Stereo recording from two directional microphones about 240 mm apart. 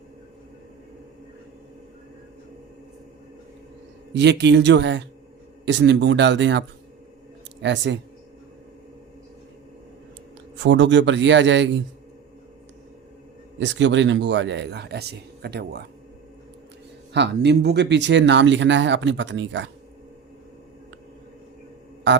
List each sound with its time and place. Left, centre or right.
4.1 s speech: right
10.6 s speech: right
13.6 s speech: right
17.2 s speech: right